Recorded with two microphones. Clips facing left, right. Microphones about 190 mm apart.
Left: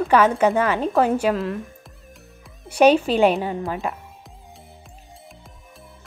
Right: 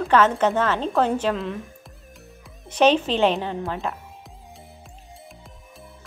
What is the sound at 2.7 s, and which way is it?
Speech, 10° left (ahead or behind).